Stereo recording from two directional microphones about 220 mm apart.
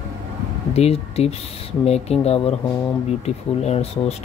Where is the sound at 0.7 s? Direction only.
30° left (ahead or behind).